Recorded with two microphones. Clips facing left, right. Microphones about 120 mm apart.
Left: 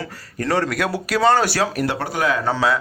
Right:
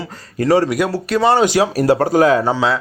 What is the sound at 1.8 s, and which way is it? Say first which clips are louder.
Speech: right 9 dB; 40° right (ahead or behind).